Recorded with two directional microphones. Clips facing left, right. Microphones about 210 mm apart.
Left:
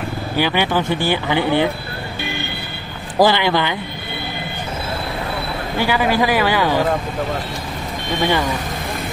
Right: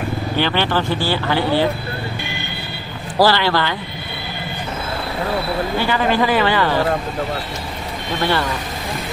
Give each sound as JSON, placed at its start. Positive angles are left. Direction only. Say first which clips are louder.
{"t": 0.4, "sound": "speech", "louder": "left 2 dB", "side_deg": 10}
{"t": 3.2, "sound": "speech", "louder": "left 1 dB", "side_deg": 15}
{"t": 5.8, "sound": "speech", "louder": "left 2 dB", "side_deg": 10}
{"t": 8.2, "sound": "speech", "louder": "left 1 dB", "side_deg": 15}